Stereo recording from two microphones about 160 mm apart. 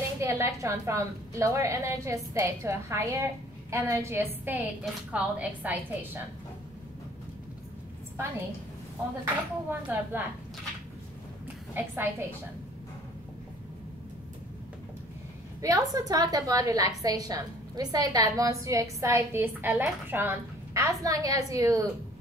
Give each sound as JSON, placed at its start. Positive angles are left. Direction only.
{"t": 0.2, "sound": "a woman's voice", "side_deg": -20}
{"t": 9.7, "sound": "a woman's voice", "side_deg": -10}
{"t": 11.7, "sound": "a woman's voice", "side_deg": -15}
{"t": 15.6, "sound": "a woman's voice", "side_deg": -20}